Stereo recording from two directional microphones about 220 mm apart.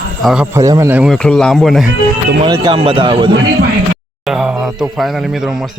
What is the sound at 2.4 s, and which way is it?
Speech, 20° right (ahead or behind).